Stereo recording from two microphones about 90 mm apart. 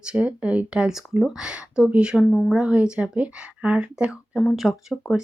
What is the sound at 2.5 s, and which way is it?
Speech, 10° right (ahead or behind).